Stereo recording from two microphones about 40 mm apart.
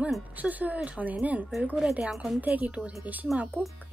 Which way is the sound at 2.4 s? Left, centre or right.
Right.